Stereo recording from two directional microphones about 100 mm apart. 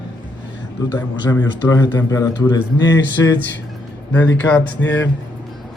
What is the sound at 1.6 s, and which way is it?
A man's voice, 30° left (ahead or behind).